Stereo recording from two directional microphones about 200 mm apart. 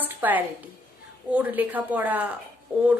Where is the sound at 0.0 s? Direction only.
10° right (ahead or behind).